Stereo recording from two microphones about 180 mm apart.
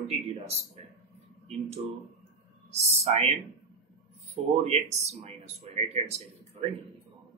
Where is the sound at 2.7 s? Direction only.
35° right (ahead or behind).